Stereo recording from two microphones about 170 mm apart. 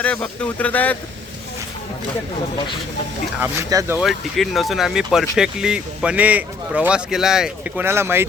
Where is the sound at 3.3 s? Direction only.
15° right (ahead or behind).